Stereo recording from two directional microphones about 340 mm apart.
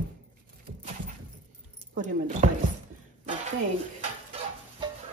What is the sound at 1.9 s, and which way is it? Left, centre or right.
Speech, right.